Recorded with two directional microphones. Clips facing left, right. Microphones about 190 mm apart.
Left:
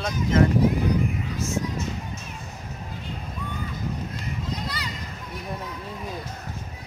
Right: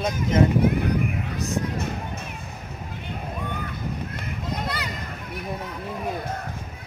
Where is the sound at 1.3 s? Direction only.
60° right (ahead or behind).